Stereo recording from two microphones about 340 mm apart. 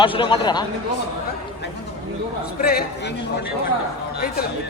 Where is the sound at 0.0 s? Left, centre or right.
Centre.